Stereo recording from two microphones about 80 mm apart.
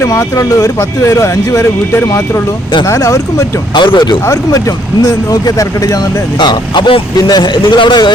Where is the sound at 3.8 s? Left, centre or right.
Left.